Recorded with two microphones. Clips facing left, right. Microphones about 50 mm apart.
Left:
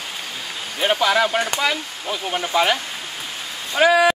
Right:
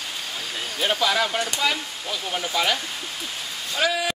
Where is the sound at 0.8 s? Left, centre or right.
Left.